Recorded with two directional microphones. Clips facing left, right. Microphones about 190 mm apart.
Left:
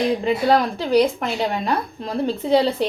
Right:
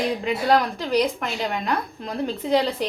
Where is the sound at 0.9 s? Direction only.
30° left (ahead or behind).